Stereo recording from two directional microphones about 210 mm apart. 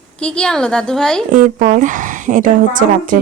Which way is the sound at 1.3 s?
40° right (ahead or behind).